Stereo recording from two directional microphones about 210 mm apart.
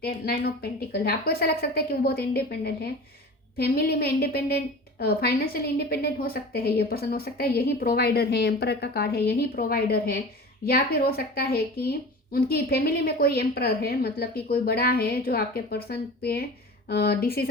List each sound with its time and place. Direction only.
0.0 s speech: 45° left (ahead or behind)